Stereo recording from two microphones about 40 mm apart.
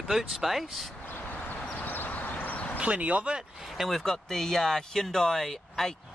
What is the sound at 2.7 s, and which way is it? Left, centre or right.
Speech, right.